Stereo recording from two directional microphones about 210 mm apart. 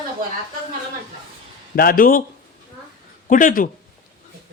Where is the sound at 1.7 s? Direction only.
45° left (ahead or behind).